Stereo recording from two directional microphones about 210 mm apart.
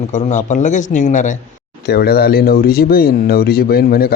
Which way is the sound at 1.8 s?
50° left (ahead or behind).